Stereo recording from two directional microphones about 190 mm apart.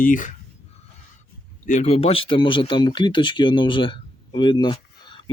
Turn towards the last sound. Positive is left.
turn(degrees=25)  # may be behind; listen again after turning